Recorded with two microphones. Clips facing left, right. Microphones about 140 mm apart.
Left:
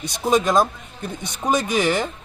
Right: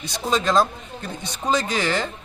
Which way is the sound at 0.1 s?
15° left (ahead or behind).